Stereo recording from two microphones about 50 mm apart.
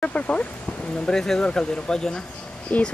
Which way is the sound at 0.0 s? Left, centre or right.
Left.